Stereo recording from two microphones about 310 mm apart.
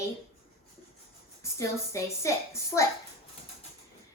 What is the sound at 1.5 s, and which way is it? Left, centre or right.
A woman's voice, centre.